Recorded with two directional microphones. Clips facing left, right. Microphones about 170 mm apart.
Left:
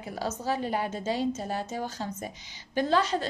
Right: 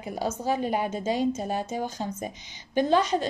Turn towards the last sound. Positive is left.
turn(degrees=-20)  # may be behind; listen again after turning